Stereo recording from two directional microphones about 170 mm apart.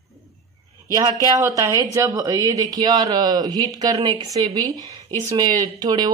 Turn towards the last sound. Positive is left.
turn(degrees=-20)  # may be behind; listen again after turning